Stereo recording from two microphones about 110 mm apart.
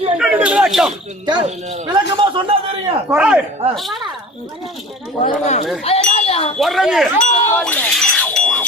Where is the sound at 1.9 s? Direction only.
45° right (ahead or behind).